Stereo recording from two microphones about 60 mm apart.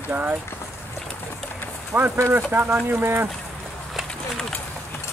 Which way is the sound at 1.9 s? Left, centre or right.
Right.